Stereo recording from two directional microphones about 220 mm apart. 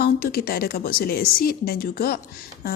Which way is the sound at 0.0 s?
45° left (ahead or behind).